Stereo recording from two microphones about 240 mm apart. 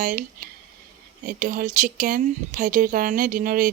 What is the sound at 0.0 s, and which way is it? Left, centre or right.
Speech, right.